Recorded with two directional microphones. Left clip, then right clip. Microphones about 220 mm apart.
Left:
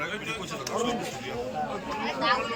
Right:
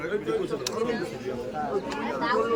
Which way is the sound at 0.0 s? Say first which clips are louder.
Right 3 dB; 20° right (ahead or behind).